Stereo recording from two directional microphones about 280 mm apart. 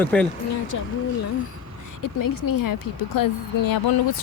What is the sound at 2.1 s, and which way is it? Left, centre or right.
Speech, left.